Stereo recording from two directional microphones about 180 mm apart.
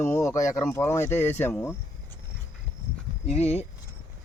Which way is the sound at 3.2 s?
35° left (ahead or behind).